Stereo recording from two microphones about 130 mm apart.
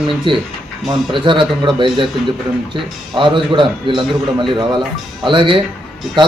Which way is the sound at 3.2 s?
40° right (ahead or behind).